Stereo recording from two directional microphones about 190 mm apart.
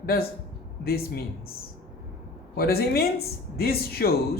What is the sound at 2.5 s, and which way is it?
A man's voice, 55° left (ahead or behind).